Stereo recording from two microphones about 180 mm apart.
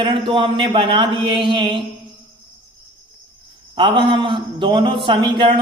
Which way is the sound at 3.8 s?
25° right (ahead or behind).